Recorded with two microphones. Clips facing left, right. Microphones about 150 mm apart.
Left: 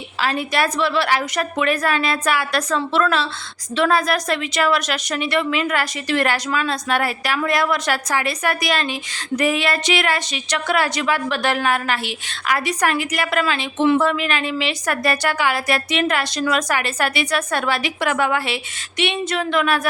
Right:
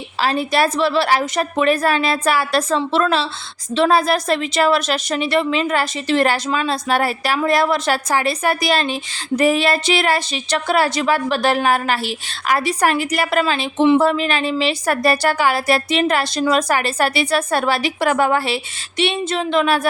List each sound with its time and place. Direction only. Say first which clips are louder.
0.2 s a woman's voice: right 3 dB; 30° right (ahead or behind)